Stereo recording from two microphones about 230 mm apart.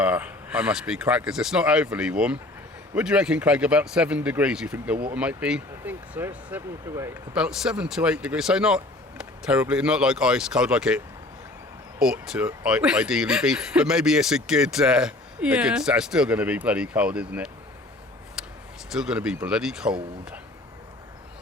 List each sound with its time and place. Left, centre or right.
0.0 s speech: centre
18.4 s a sound: centre
18.9 s speech: centre